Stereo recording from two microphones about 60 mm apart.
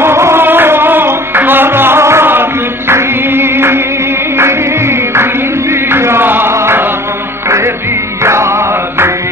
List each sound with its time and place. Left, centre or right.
0.0 s music: right